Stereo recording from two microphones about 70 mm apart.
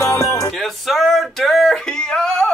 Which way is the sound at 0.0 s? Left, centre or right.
Left.